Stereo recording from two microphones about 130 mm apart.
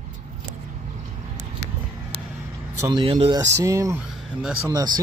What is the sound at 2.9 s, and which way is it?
Speech, 45° right (ahead or behind).